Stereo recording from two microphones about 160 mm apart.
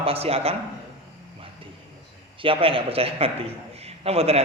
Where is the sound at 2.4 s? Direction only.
35° right (ahead or behind).